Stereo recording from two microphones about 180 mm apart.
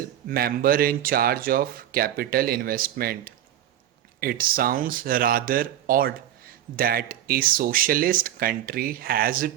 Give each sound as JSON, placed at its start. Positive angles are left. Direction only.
{"t": 0.3, "sound": "speech", "side_deg": -55}